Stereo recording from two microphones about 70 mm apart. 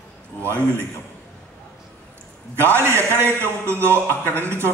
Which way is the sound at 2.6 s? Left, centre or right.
Right.